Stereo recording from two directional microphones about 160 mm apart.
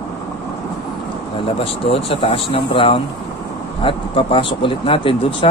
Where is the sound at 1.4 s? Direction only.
35° left (ahead or behind).